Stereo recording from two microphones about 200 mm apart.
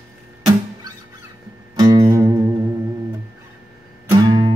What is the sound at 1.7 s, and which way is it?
Music, 20° right (ahead or behind).